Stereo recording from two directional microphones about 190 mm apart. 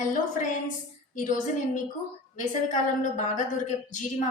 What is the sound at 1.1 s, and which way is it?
A woman's voice, 45° left (ahead or behind).